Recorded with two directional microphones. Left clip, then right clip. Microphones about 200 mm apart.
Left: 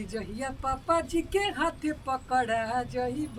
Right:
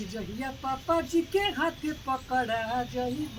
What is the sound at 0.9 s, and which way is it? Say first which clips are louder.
Speech: right 1 dB; 5° left (ahead or behind).